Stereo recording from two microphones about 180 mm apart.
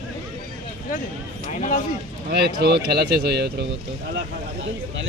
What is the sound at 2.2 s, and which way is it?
Speech, 65° right (ahead or behind).